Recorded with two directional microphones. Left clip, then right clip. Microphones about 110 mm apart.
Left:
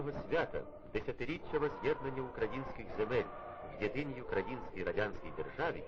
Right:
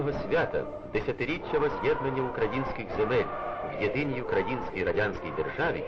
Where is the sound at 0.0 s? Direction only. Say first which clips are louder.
Right 9 dB; 35° left (ahead or behind).